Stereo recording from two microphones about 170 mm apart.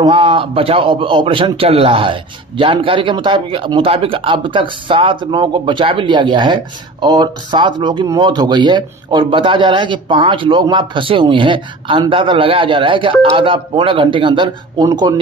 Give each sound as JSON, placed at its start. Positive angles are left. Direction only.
{"t": 0.0, "sound": "a man's voice", "side_deg": -35}